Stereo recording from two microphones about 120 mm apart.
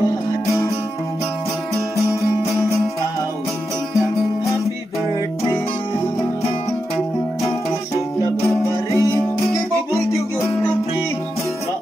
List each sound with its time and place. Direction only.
8.5 s music: 25° left (ahead or behind)